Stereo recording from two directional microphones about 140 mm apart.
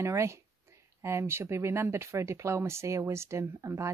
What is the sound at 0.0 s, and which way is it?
Speech, 20° right (ahead or behind).